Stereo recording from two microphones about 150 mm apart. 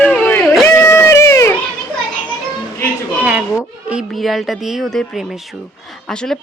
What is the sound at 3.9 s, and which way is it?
Speech, 5° right (ahead or behind).